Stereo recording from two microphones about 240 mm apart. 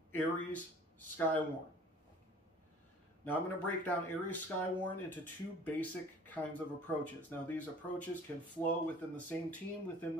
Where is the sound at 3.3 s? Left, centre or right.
Centre.